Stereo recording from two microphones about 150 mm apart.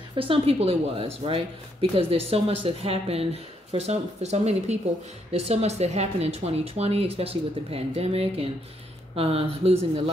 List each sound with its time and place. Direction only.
0.1 s speech: 35° right (ahead or behind)